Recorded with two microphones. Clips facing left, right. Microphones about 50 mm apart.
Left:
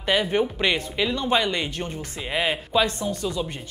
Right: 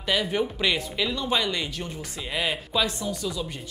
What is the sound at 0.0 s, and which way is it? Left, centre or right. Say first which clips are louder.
Speech: left 3 dB; left.